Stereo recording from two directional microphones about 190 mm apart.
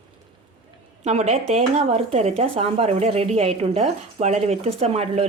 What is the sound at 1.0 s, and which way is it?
Speech, 35° right (ahead or behind).